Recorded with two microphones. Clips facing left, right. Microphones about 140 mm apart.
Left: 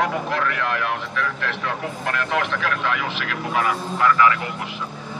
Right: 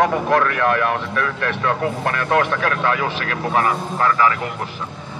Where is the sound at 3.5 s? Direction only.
40° right (ahead or behind).